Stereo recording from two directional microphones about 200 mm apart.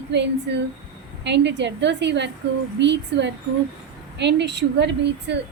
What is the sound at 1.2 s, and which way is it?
A woman's voice, 60° right (ahead or behind).